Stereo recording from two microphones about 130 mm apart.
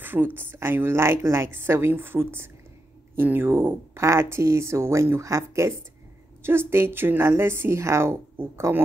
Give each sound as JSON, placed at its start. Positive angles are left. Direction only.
{"t": 0.0, "sound": "a woman's voice", "side_deg": -15}